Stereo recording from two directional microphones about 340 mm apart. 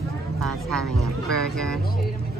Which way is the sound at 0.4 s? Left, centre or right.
Centre.